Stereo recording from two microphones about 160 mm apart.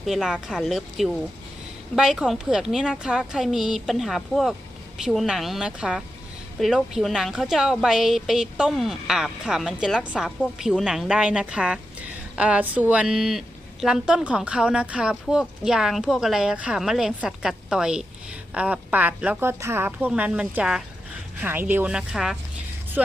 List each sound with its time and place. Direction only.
0.0 s a woman's voice: centre (ahead or behind)